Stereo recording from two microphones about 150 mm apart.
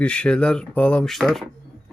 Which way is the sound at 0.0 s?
5° left (ahead or behind).